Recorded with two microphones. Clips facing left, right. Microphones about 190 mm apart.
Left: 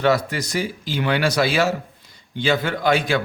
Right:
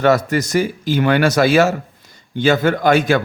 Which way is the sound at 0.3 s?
45° right (ahead or behind).